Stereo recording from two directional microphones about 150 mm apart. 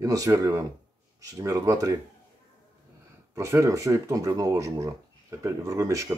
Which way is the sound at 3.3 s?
20° right (ahead or behind).